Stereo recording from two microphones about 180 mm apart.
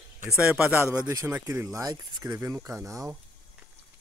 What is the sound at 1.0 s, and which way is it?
Speech, 20° right (ahead or behind).